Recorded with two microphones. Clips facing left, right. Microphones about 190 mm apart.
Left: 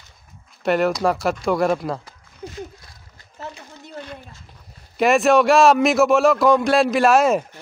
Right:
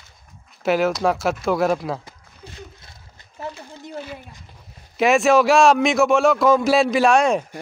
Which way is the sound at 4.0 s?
5° right (ahead or behind).